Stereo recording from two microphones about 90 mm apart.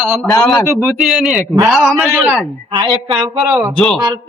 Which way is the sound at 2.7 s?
65° right (ahead or behind).